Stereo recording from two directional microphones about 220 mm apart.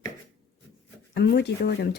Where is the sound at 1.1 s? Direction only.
50° left (ahead or behind).